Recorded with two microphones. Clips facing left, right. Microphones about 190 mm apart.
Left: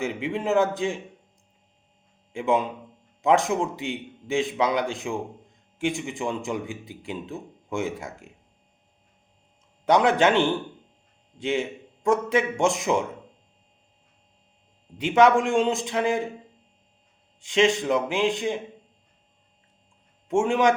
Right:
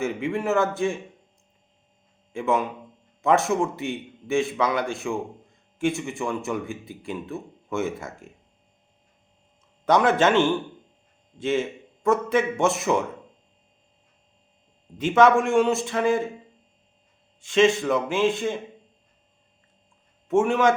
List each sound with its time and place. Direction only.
0.0 s a man's voice: 15° left (ahead or behind)
2.3 s a man's voice: 15° left (ahead or behind)
9.8 s a man's voice: 15° left (ahead or behind)
14.9 s a man's voice: 15° left (ahead or behind)
17.4 s a man's voice: 15° left (ahead or behind)
20.2 s a man's voice: 15° left (ahead or behind)